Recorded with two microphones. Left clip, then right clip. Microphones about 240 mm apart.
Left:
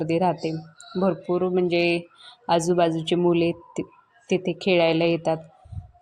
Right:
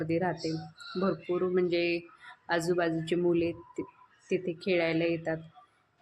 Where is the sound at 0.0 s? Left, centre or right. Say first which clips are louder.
Left 8 dB; centre.